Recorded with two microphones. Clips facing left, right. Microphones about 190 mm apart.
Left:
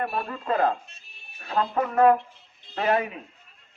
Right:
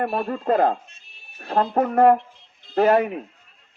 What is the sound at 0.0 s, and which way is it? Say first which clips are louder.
Speech: right 6 dB; 45° right (ahead or behind).